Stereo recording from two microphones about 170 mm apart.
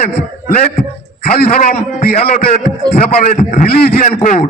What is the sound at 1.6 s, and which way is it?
A man's voice, 40° left (ahead or behind).